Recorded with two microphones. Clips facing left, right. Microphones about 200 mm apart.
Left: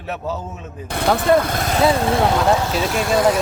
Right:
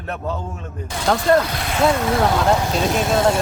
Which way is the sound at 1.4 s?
50° left (ahead or behind).